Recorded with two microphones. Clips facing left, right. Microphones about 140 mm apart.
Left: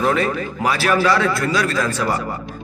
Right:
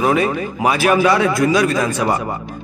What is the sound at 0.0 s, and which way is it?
A man's voice, 15° right (ahead or behind).